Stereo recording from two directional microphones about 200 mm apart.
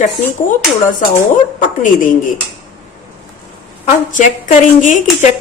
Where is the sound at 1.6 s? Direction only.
40° left (ahead or behind).